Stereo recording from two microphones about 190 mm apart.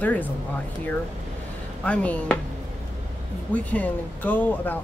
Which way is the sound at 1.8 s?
5° left (ahead or behind).